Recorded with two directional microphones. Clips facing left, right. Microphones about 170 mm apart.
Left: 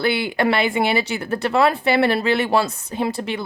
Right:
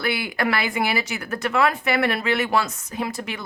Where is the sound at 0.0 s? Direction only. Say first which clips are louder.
Left 5 dB; 25° left (ahead or behind).